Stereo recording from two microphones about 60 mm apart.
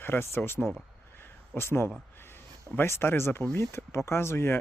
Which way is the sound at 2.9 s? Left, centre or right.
Left.